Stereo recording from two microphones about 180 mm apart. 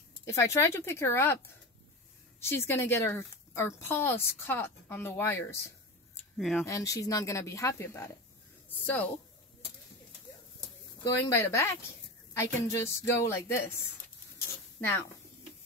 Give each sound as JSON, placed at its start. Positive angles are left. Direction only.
{"t": 0.2, "sound": "speech", "side_deg": 15}
{"t": 6.3, "sound": "speech", "side_deg": 0}
{"t": 6.6, "sound": "speech", "side_deg": 15}
{"t": 11.3, "sound": "speech", "side_deg": 15}